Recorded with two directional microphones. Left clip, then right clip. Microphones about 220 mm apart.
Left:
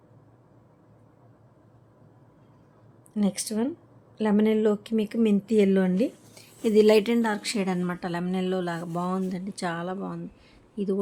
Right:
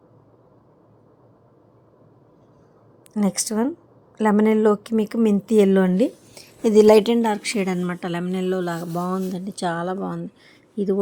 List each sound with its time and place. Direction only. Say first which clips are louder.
3.1 s speech: right 5 dB; 20° right (ahead or behind)